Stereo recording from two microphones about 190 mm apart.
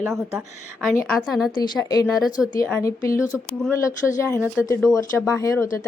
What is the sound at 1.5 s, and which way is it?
Speech, 20° left (ahead or behind).